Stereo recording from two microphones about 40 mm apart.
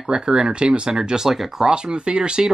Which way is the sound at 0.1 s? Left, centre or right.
Right.